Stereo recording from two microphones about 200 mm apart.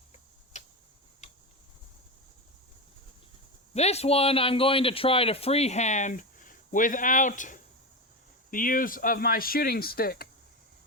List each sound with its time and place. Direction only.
0.5 s tick-tock: 35° left (ahead or behind)
3.8 s speech: 30° left (ahead or behind); by 10.2 s 50° left (ahead or behind)